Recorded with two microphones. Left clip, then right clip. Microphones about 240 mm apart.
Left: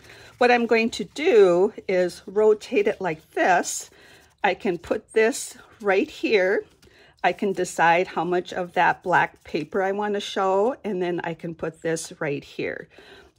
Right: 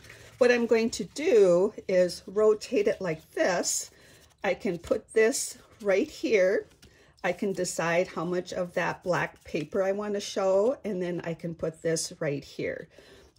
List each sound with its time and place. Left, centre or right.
0.4 s speech: centre
3.6 s speech: left
4.4 s speech: centre
10.5 s speech: left
10.8 s speech: centre